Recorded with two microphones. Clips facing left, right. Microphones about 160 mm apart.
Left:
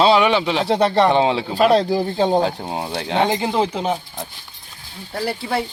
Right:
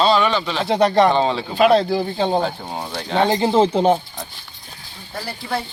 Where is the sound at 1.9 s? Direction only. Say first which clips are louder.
Left 2 dB; 10° left (ahead or behind).